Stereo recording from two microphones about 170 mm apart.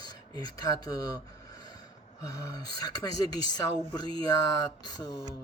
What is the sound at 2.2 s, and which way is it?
Speech, 20° left (ahead or behind).